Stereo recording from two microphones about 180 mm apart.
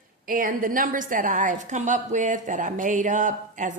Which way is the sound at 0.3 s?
50° right (ahead or behind).